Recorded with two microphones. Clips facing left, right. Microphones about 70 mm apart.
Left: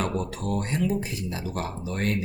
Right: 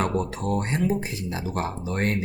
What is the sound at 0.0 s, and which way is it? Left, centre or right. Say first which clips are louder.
Speech: right 3 dB; right.